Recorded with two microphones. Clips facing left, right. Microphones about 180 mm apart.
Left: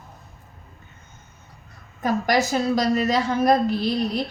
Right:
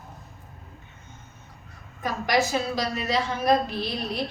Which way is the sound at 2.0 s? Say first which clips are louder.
Left 3 dB; 40° left (ahead or behind).